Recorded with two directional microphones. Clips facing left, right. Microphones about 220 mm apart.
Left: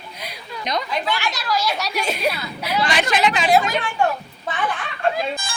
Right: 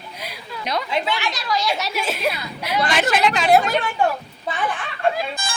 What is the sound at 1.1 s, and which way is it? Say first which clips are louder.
Speech: even; centre (ahead or behind).